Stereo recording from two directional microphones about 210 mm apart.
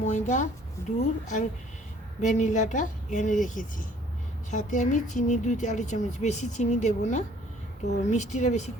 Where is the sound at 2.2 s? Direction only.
35° left (ahead or behind).